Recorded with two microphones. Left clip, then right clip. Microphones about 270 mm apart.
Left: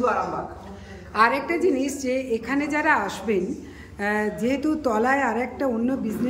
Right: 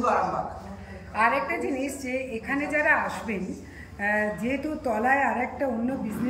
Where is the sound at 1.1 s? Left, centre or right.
Centre.